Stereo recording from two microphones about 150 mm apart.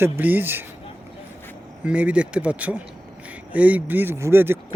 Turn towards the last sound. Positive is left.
turn(degrees=-15)  # may be behind; listen again after turning